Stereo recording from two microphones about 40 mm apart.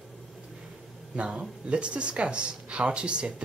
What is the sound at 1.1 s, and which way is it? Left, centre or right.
Speech, right.